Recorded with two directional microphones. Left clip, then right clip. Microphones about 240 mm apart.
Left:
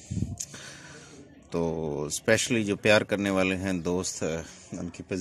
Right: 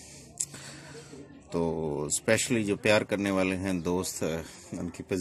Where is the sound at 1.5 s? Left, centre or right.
Centre.